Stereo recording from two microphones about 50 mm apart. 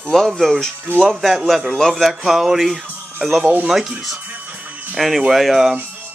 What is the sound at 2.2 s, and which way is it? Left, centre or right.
Speech, centre.